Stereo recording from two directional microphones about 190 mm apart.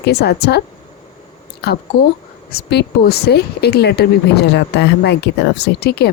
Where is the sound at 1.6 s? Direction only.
60° left (ahead or behind).